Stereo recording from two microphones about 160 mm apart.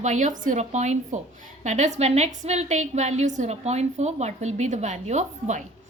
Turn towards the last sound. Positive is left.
turn(degrees=-45)  # may be behind; listen again after turning